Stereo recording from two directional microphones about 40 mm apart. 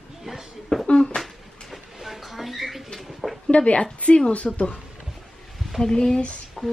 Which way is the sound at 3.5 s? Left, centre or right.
Left.